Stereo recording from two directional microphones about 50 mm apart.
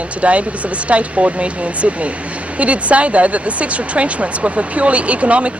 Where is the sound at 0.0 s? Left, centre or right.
Right.